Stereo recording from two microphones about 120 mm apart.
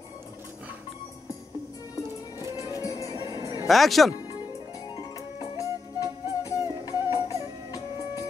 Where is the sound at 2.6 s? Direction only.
30° left (ahead or behind).